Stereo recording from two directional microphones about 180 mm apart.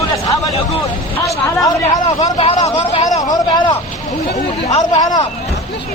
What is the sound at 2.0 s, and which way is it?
Speech, 30° left (ahead or behind).